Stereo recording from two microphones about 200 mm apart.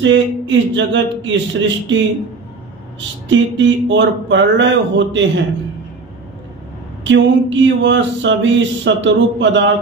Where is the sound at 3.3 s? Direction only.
65° right (ahead or behind).